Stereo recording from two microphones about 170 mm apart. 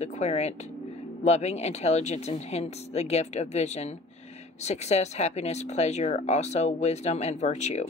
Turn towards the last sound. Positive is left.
turn(degrees=40)  # may be behind; listen again after turning